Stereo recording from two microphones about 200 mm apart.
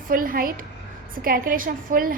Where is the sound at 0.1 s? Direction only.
45° right (ahead or behind).